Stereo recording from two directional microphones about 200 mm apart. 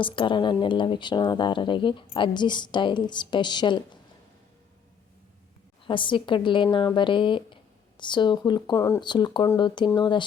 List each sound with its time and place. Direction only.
0.0 s speech: 25° left (ahead or behind)
5.8 s speech: 25° left (ahead or behind)